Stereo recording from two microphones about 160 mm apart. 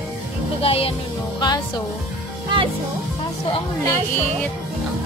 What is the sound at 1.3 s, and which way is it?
Speech, 25° left (ahead or behind).